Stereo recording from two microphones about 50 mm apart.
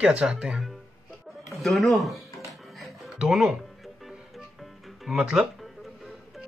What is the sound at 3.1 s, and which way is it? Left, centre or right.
Speech, centre.